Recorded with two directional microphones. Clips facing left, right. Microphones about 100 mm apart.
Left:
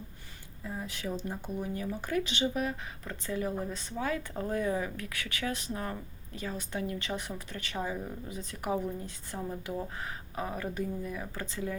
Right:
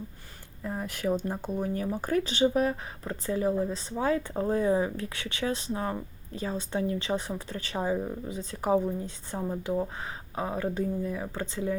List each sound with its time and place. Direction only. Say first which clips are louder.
0.6 s speech: right 6 dB; 60° right (ahead or behind)
1.4 s speech: right 5 dB; 45° right (ahead or behind); by 11.8 s 25° right (ahead or behind)